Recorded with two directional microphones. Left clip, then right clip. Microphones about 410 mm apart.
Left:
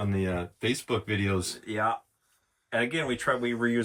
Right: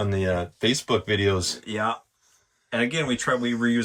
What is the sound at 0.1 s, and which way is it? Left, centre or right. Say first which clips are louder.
Speech: right 6 dB; centre.